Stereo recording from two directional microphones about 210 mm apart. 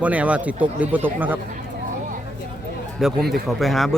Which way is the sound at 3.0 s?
Centre (ahead or behind).